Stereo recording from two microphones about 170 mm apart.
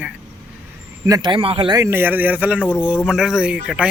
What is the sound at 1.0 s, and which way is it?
Speech, 25° right (ahead or behind).